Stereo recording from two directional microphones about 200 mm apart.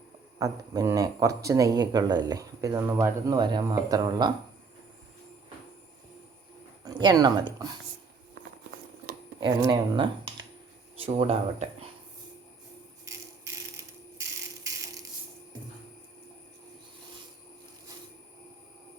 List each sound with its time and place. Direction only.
0.3 s speech: 15° right (ahead or behind)
6.8 s speech: 20° right (ahead or behind)
9.4 s speech: 20° right (ahead or behind)
14.2 s a sound: 15° right (ahead or behind)